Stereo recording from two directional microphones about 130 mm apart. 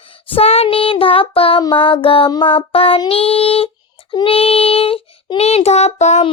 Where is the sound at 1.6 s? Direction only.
40° left (ahead or behind); by 6.2 s 60° left (ahead or behind).